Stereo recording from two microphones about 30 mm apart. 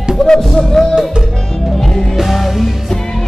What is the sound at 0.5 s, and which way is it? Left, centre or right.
Music, centre.